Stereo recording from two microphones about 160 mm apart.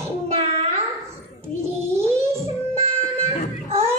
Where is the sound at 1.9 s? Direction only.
15° right (ahead or behind).